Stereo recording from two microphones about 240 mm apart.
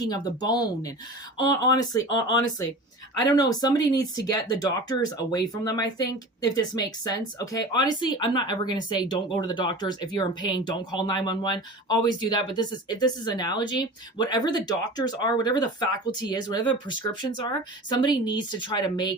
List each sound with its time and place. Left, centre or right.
0.0 s speech: centre